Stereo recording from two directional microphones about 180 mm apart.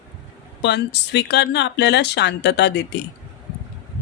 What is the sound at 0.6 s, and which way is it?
Speech, 75° left (ahead or behind).